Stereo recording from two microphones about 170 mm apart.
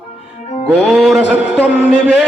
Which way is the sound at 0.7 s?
Centre (ahead or behind).